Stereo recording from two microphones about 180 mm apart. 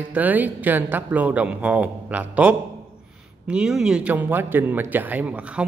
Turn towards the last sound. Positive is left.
turn(degrees=-5)  # may be behind; listen again after turning